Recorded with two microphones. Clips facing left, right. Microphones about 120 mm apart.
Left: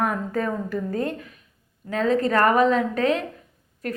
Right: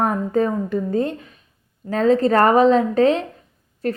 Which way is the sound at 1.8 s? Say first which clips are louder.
Right 5 dB; 35° right (ahead or behind).